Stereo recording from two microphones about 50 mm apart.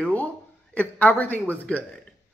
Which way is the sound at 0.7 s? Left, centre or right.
Left.